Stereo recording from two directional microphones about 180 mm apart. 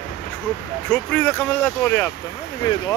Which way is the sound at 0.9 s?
10° left (ahead or behind).